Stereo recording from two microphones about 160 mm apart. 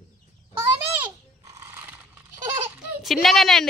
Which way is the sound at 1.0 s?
20° right (ahead or behind).